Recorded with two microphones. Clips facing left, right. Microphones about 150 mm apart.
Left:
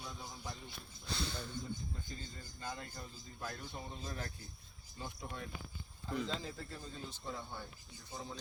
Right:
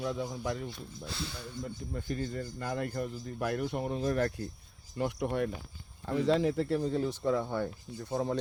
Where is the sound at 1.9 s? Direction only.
70° right (ahead or behind).